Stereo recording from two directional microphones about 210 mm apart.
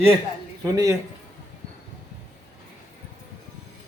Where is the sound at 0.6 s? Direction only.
15° right (ahead or behind).